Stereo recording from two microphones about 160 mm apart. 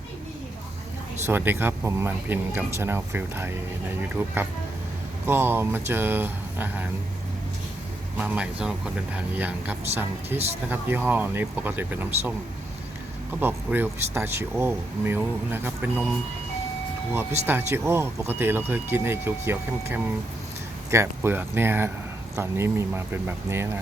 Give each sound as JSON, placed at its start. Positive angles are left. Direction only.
{"t": 1.3, "sound": "speech", "side_deg": -10}
{"t": 8.2, "sound": "speech", "side_deg": -5}
{"t": 13.4, "sound": "speech", "side_deg": -10}
{"t": 17.4, "sound": "speech", "side_deg": -15}